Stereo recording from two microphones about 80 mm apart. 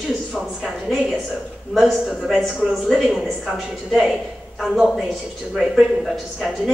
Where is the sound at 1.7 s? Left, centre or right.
Centre.